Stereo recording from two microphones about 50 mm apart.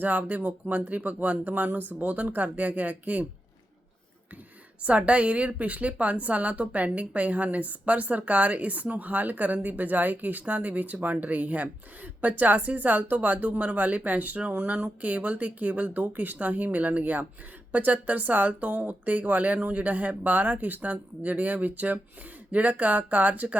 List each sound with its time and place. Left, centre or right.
0.0 s speech: right
4.8 s a woman's voice: right